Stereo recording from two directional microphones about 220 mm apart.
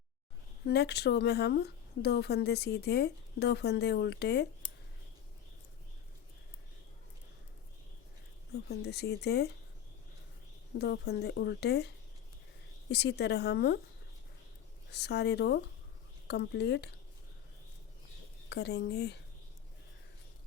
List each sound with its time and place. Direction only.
0.6 s speech: 50° left (ahead or behind)
8.5 s speech: 50° left (ahead or behind)
10.8 s speech: 50° left (ahead or behind)
12.9 s speech: 50° left (ahead or behind)
14.8 s speech: 50° left (ahead or behind)
18.4 s speech: 50° left (ahead or behind)